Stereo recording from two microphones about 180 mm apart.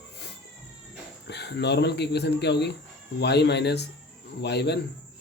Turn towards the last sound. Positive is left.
turn(degrees=70)  # may be behind; listen again after turning